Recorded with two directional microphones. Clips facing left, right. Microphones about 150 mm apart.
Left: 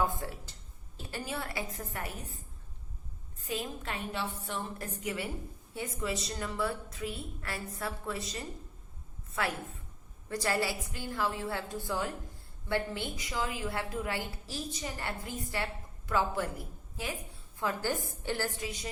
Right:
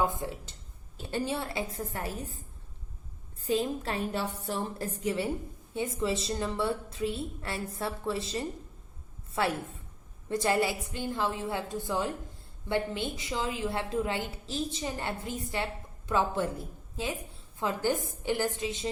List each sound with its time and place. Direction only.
0.0 s a woman's voice: 20° right (ahead or behind)
3.4 s a woman's voice: 30° right (ahead or behind)